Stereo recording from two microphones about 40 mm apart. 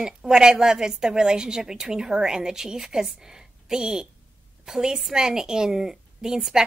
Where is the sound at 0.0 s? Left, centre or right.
Centre.